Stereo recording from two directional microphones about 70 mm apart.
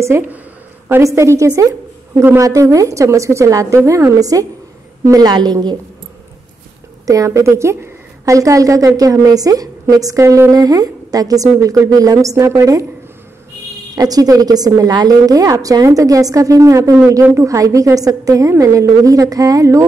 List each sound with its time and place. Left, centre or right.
1.0 s a woman's voice: right
5.3 s a woman's voice: right
7.1 s a woman's voice: right
10.5 s a woman's voice: right
13.9 s a woman's voice: right